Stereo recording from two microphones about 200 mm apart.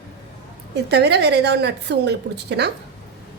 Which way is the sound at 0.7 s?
55° right (ahead or behind).